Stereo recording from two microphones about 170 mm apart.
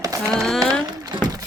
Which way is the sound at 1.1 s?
25° right (ahead or behind).